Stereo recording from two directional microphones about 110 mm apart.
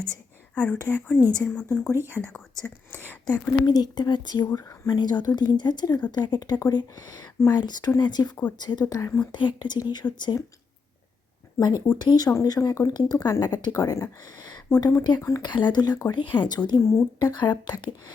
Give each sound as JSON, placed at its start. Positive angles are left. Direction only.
{"t": 0.5, "sound": "speech", "side_deg": 10}
{"t": 3.7, "sound": "speech", "side_deg": 40}
{"t": 8.9, "sound": "speech", "side_deg": 30}
{"t": 9.3, "sound": "speech", "side_deg": 45}
{"t": 11.9, "sound": "speech", "side_deg": 40}
{"t": 12.9, "sound": "speech", "side_deg": 40}
{"t": 17.2, "sound": "speech", "side_deg": 40}